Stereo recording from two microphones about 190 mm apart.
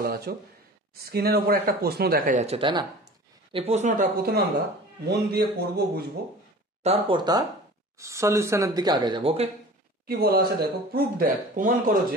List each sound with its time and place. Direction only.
0.0 s speech: 55° right (ahead or behind); by 2.9 s 25° right (ahead or behind)
3.5 s a man's voice: 35° right (ahead or behind); by 6.0 s 55° right (ahead or behind)
6.8 s speech: 30° right (ahead or behind)
10.0 s speech: 55° right (ahead or behind)